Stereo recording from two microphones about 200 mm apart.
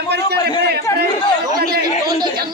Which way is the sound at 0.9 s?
15° left (ahead or behind).